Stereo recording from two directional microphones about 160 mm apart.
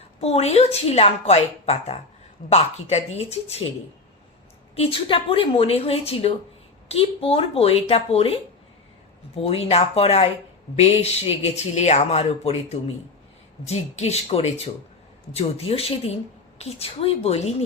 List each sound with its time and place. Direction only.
0.2 s a woman's voice: 40° left (ahead or behind)
4.7 s a woman's voice: 35° left (ahead or behind)